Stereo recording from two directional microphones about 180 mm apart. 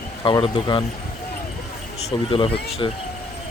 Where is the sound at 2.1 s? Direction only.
30° left (ahead or behind).